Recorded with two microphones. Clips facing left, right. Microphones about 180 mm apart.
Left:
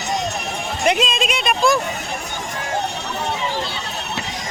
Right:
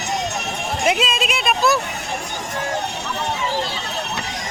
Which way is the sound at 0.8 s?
5° right (ahead or behind).